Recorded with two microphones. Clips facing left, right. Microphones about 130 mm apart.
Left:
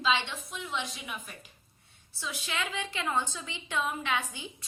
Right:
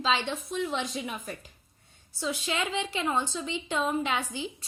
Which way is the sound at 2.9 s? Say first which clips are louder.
Right 1 dB; 20° right (ahead or behind).